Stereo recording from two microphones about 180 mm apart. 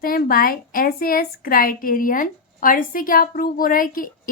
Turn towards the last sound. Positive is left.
turn(degrees=50)  # may be behind; listen again after turning